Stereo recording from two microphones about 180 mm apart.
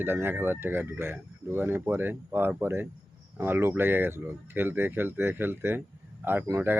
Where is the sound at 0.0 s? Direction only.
10° right (ahead or behind).